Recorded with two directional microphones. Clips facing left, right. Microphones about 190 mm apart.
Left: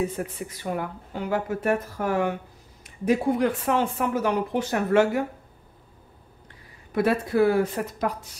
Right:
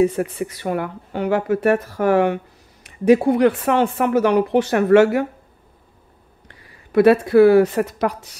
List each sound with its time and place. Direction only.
0.0 s speech: 75° right (ahead or behind)
6.4 s speech: 75° right (ahead or behind)